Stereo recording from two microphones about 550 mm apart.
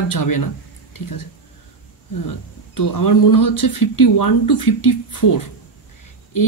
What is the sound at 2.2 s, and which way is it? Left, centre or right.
Speech, left.